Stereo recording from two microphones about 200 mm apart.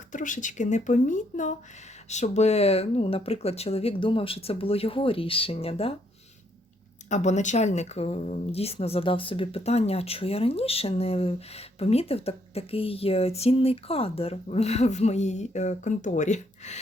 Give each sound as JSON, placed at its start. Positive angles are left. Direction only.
{"t": 0.1, "sound": "speech", "side_deg": 40}
{"t": 7.1, "sound": "speech", "side_deg": 35}